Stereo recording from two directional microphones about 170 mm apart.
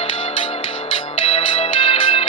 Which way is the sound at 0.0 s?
30° left (ahead or behind).